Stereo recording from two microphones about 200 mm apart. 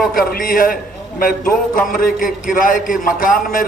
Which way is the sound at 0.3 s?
45° left (ahead or behind).